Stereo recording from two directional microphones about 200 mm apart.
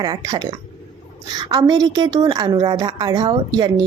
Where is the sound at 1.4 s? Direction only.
20° right (ahead or behind).